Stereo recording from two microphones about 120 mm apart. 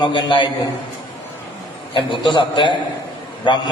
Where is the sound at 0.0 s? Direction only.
40° left (ahead or behind).